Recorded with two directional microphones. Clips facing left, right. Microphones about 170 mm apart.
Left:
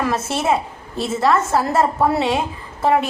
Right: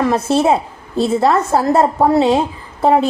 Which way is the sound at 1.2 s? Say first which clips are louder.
Even; 25° right (ahead or behind).